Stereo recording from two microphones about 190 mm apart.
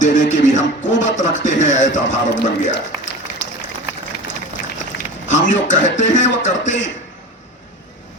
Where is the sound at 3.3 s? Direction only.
45° left (ahead or behind).